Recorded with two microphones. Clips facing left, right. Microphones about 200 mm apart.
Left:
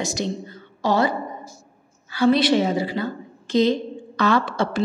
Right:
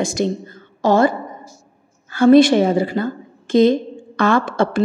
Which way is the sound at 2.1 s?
50° right (ahead or behind).